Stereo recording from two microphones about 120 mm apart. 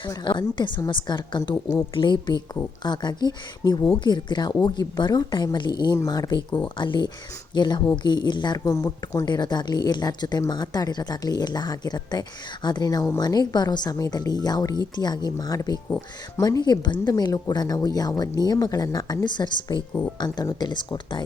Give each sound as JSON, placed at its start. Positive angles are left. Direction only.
{"t": 0.0, "sound": "speech", "side_deg": 40}